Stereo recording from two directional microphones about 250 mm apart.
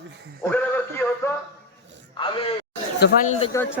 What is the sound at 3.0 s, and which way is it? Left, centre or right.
Speech, left.